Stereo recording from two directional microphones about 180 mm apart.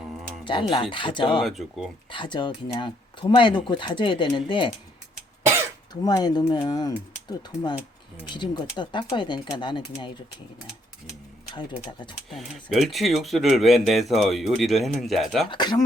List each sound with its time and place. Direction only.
0.4 s speech: 25° left (ahead or behind)
1.4 s speech: centre (ahead or behind)
2.0 s speech: 25° left (ahead or behind)
5.9 s speech: 20° left (ahead or behind)
11.5 s speech: 25° left (ahead or behind)
12.3 s speech: centre (ahead or behind)
15.4 s speech: 25° left (ahead or behind)